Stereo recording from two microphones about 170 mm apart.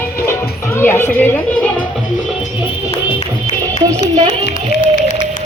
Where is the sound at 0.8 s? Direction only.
15° left (ahead or behind).